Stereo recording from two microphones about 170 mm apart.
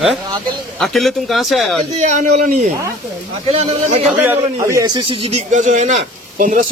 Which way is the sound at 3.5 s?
35° right (ahead or behind).